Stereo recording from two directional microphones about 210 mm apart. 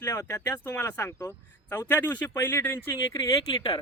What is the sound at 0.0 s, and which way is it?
Speech, 15° left (ahead or behind).